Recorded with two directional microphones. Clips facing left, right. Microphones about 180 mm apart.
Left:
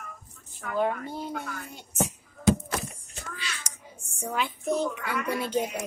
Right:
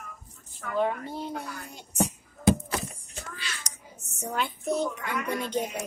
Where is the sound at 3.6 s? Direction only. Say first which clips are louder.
Even; 40° right (ahead or behind).